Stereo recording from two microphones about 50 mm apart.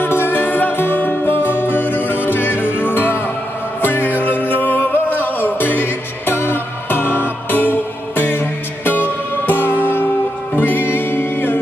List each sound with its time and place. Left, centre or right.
0.0 s music: left